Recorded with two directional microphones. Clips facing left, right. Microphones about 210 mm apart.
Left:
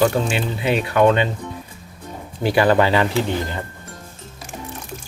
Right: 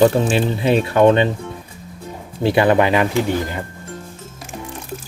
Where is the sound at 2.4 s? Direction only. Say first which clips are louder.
Right 2 dB; 20° right (ahead or behind).